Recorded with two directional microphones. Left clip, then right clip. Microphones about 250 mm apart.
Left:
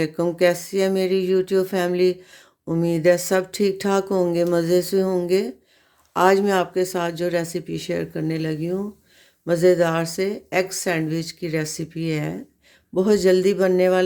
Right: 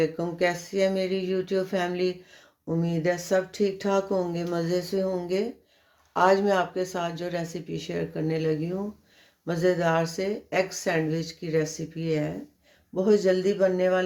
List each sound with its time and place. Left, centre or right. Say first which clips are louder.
0.0 s speech: left 6 dB; left